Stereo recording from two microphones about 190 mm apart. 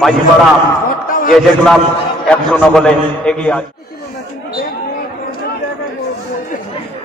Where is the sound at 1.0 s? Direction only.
45° left (ahead or behind).